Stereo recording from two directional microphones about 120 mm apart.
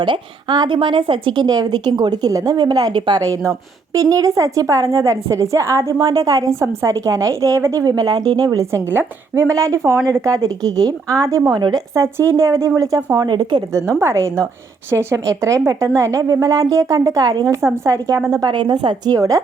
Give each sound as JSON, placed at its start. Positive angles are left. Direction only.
{"t": 0.0, "sound": "a woman's voice", "side_deg": -40}
{"t": 13.7, "sound": "a woman's voice", "side_deg": -25}
{"t": 18.3, "sound": "speech", "side_deg": -35}